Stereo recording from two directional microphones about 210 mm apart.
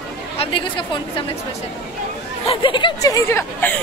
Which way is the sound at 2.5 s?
25° left (ahead or behind).